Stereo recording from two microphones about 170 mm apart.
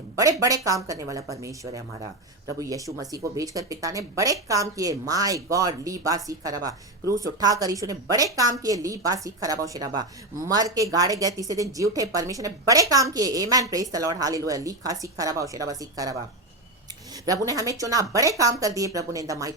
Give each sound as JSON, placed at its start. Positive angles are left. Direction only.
{"t": 0.2, "sound": "speech", "side_deg": -20}
{"t": 17.2, "sound": "speech", "side_deg": -20}